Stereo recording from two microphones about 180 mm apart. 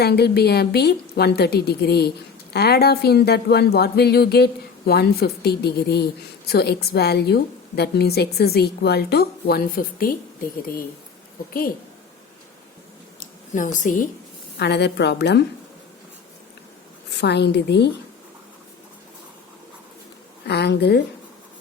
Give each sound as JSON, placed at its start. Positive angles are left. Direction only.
{"t": 0.0, "sound": "a woman's voice", "side_deg": 65}
{"t": 13.1, "sound": "a sound", "side_deg": 45}
{"t": 14.6, "sound": "a woman's voice", "side_deg": 70}
{"t": 17.1, "sound": "a woman's voice", "side_deg": 70}
{"t": 20.5, "sound": "a woman's voice", "side_deg": 65}